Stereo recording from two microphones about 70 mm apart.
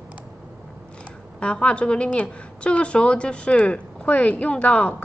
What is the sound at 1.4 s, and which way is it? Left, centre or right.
A woman's voice, centre.